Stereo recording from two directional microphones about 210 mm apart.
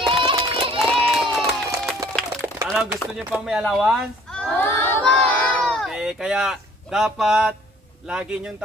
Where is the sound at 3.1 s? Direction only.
5° right (ahead or behind).